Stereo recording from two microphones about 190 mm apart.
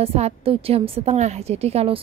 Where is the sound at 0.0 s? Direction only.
30° right (ahead or behind).